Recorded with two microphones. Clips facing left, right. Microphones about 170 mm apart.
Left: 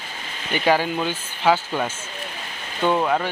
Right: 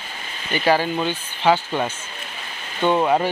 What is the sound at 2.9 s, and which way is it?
Speech, 10° right (ahead or behind).